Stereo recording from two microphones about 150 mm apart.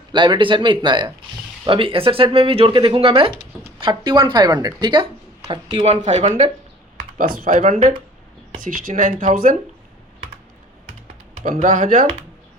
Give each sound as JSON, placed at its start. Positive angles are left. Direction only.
{"t": 0.1, "sound": "speech", "side_deg": -30}
{"t": 7.2, "sound": "speech", "side_deg": -70}
{"t": 8.5, "sound": "speech", "side_deg": -70}
{"t": 11.4, "sound": "speech", "side_deg": -65}